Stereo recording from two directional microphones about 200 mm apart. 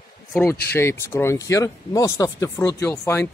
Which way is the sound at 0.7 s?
15° left (ahead or behind).